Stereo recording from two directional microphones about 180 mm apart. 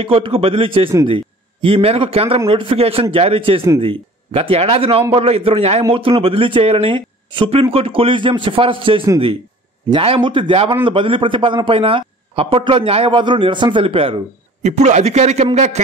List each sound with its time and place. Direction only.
0.0 s a man's voice: 30° right (ahead or behind)